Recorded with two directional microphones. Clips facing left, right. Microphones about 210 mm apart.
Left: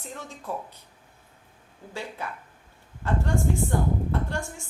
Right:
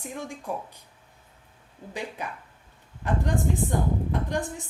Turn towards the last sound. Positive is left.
turn(degrees=-15)  # may be behind; listen again after turning